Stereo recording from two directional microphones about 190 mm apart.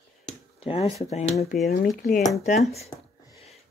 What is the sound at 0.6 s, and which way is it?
Speech, 30° left (ahead or behind).